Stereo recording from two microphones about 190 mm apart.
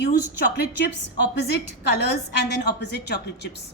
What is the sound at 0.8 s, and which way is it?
A woman's voice, 65° left (ahead or behind).